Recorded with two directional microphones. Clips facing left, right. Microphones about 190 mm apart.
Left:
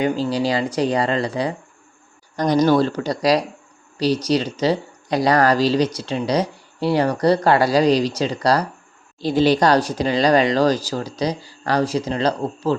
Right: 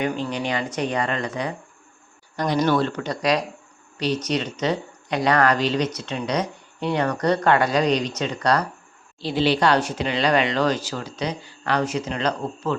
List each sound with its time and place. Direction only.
0.0 s speech: 35° left (ahead or behind)
2.3 s speech: 40° left (ahead or behind)